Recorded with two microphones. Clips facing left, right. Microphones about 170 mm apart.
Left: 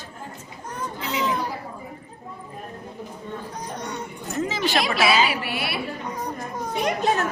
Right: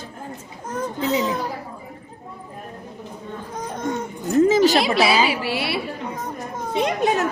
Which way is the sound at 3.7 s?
50° right (ahead or behind).